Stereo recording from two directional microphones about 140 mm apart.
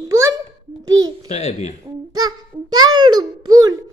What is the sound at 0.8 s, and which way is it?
Babbling, 25° right (ahead or behind).